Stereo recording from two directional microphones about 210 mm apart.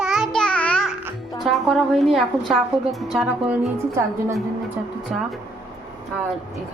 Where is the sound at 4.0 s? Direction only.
15° right (ahead or behind).